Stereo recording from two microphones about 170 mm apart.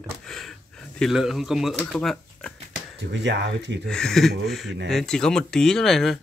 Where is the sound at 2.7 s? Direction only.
90° right.